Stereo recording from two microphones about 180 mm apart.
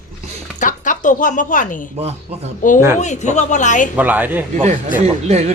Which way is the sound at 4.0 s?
10° right (ahead or behind).